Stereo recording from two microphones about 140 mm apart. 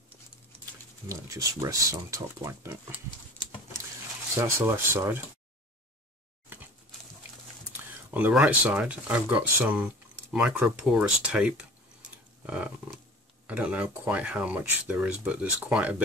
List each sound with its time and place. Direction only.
1.0 s speech: 25° right (ahead or behind)
4.4 s speech: 20° right (ahead or behind)
8.1 s speech: 10° right (ahead or behind)
11.2 s a sound: 5° right (ahead or behind)
13.5 s speech: 10° right (ahead or behind)